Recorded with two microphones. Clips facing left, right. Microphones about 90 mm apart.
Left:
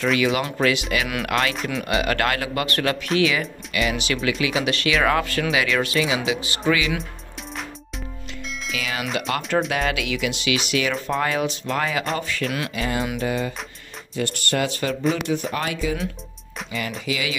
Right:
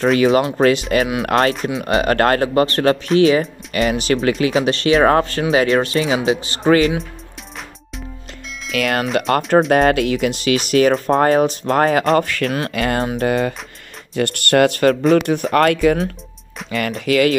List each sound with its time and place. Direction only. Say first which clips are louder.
0.0 s speech: right 7 dB; 40° right (ahead or behind)
1.0 s speech: right 6 dB; 25° right (ahead or behind)
1.3 s speech: right 7 dB; 40° right (ahead or behind)
8.7 s speech: right 11 dB; 60° right (ahead or behind)
9.7 s speech: right 10 dB; 45° right (ahead or behind)
12.7 s speech: right 6 dB; 70° right (ahead or behind)
13.2 s speech: right 7 dB; 50° right (ahead or behind)
14.1 s speech: right 9 dB; 60° right (ahead or behind)
17.0 s speech: right 15 dB; 55° right (ahead or behind)